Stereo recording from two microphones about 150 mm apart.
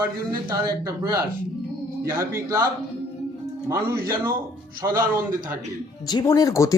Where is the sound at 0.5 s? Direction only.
25° right (ahead or behind).